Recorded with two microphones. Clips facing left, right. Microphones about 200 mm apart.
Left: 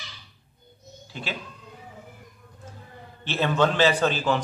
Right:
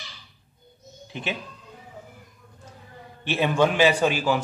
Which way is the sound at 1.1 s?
20° right (ahead or behind).